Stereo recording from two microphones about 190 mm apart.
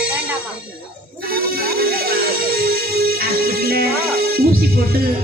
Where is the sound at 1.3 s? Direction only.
55° right (ahead or behind).